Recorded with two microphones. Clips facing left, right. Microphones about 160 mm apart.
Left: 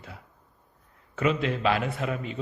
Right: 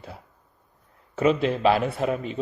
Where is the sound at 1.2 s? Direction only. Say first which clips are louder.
Right 5 dB; 35° right (ahead or behind).